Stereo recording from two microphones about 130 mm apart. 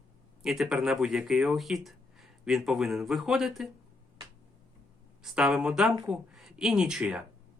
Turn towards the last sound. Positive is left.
turn(degrees=-5)  # may be behind; listen again after turning